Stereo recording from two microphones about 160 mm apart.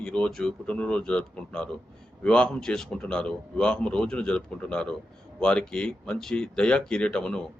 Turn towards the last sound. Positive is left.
turn(degrees=5)  # may be behind; listen again after turning